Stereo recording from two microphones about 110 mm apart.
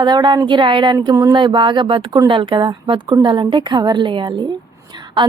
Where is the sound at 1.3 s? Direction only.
45° right (ahead or behind).